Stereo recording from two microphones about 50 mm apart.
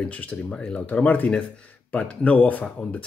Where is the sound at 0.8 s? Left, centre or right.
Left.